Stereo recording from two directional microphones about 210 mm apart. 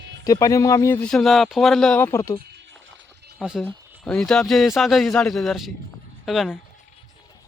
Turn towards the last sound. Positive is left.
turn(degrees=0)  # may be behind; listen again after turning